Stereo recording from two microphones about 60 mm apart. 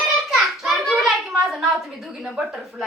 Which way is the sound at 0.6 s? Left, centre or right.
Centre.